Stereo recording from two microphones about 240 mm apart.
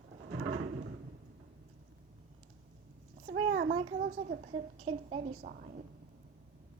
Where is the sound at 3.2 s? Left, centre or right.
Right.